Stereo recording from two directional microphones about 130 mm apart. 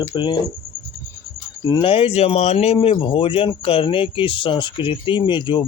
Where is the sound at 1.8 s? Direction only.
45° left (ahead or behind).